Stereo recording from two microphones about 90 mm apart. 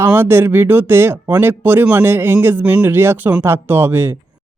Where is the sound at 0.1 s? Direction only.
25° right (ahead or behind).